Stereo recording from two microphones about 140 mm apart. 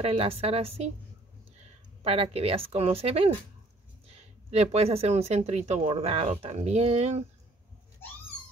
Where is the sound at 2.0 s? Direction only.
45° right (ahead or behind).